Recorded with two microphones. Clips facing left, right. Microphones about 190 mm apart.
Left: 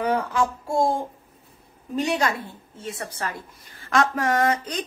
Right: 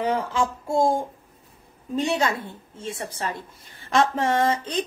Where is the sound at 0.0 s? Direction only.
20° right (ahead or behind).